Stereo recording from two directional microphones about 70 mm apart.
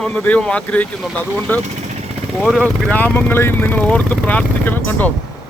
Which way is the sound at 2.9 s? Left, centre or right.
Left.